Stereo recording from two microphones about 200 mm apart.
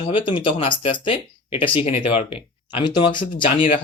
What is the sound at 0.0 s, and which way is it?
Speech, 25° left (ahead or behind).